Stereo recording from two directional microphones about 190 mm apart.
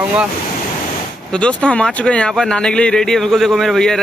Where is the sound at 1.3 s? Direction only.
5° left (ahead or behind).